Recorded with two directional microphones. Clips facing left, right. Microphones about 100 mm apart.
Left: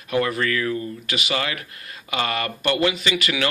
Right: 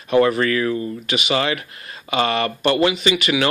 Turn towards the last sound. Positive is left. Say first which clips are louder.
# right 5 dB
turn(degrees=-20)  # may be behind; listen again after turning